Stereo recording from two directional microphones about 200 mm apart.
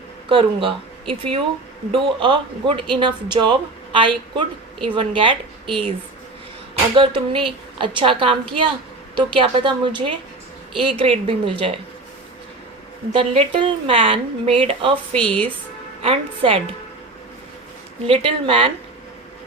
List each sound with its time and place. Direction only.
0.3 s speech: 25° right (ahead or behind)
6.9 s speech: 25° right (ahead or behind)
13.1 s speech: 30° right (ahead or behind)
15.1 s speech: 5° left (ahead or behind)
16.0 s speech: 30° right (ahead or behind)
18.0 s speech: 25° right (ahead or behind)